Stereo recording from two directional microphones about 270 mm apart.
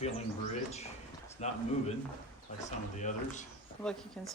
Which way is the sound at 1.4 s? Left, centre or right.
Left.